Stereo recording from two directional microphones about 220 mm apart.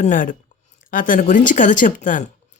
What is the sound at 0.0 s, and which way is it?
A woman's voice, 35° left (ahead or behind).